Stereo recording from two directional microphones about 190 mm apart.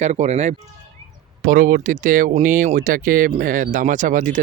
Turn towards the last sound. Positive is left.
turn(degrees=-45)  # may be behind; listen again after turning